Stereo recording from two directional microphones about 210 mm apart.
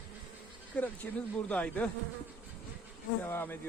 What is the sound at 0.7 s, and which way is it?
Speech, 5° left (ahead or behind).